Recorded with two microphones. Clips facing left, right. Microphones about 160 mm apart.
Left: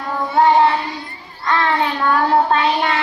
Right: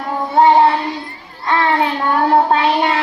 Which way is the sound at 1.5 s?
30° right (ahead or behind).